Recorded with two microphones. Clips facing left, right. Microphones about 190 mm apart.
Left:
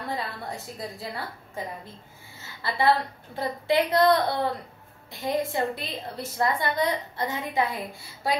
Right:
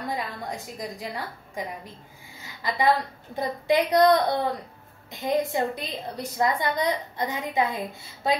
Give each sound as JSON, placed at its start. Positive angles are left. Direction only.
{"t": 0.1, "sound": "a woman's voice", "side_deg": -15}
{"t": 2.3, "sound": "a sound", "side_deg": -15}
{"t": 3.3, "sound": "a woman's voice", "side_deg": -20}